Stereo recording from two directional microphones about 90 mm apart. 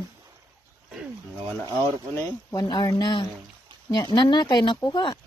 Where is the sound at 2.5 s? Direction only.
50° left (ahead or behind).